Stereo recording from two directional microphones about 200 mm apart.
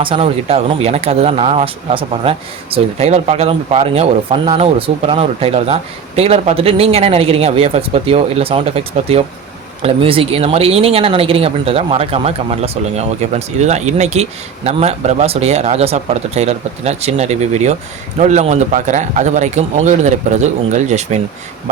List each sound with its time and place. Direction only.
0.0 s speech: 30° right (ahead or behind)